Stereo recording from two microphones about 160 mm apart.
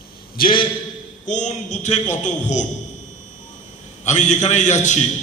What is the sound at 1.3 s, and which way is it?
A man's voice, 45° left (ahead or behind).